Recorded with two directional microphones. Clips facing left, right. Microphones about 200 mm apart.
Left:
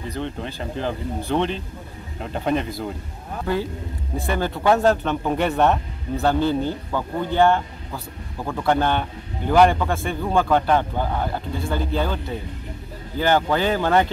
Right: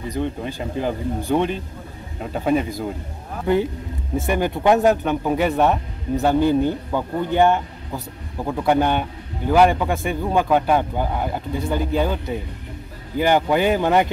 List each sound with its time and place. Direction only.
0.1 s speech: 10° right (ahead or behind)
3.5 s speech: 20° right (ahead or behind)